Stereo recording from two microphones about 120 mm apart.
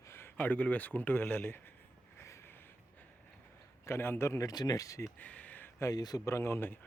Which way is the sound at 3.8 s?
20° left (ahead or behind).